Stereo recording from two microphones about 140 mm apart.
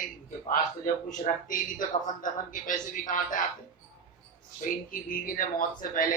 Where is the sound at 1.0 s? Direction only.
55° left (ahead or behind).